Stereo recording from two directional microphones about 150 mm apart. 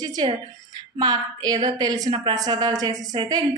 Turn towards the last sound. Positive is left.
turn(degrees=-25)  # may be behind; listen again after turning